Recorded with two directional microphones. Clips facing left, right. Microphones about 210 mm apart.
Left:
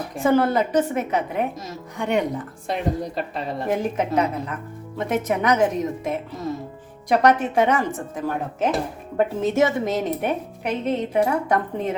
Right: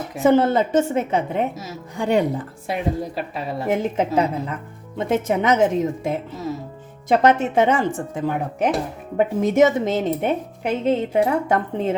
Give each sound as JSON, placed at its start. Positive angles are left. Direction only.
{"t": 0.2, "sound": "a woman's voice", "side_deg": -20}
{"t": 2.6, "sound": "speech", "side_deg": -5}
{"t": 3.7, "sound": "a woman's voice", "side_deg": -30}
{"t": 9.1, "sound": "a woman's voice", "side_deg": -15}